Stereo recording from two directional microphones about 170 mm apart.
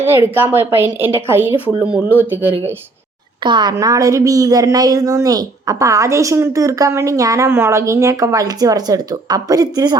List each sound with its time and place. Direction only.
0.0 s a woman's voice: 10° right (ahead or behind)
3.4 s speech: 25° right (ahead or behind)